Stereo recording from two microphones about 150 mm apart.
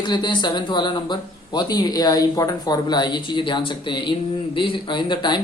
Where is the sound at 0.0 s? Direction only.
30° left (ahead or behind).